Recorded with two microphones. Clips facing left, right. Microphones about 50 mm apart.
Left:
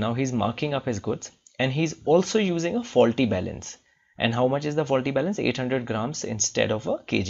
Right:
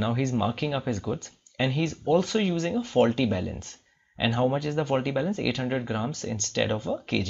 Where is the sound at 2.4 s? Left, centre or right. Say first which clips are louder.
Left 2 dB; centre.